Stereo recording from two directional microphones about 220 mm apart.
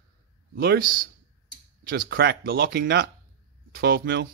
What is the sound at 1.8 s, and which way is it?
Speech, 40° right (ahead or behind).